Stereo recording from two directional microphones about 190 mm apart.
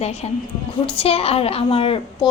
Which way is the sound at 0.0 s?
35° left (ahead or behind).